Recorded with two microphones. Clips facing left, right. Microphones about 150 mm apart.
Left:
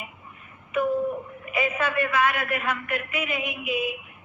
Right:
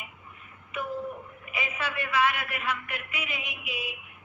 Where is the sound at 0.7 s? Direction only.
50° left (ahead or behind).